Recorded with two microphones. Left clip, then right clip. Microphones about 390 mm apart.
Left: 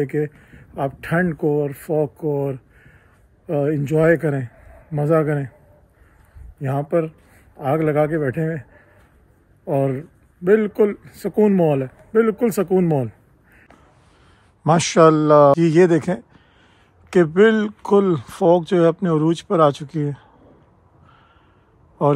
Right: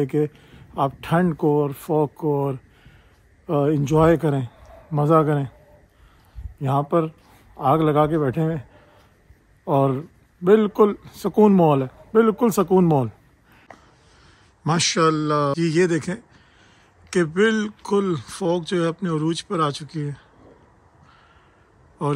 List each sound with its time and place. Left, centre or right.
0.0 s speech: centre
6.6 s speech: centre
9.7 s speech: centre
14.6 s speech: centre
22.0 s speech: centre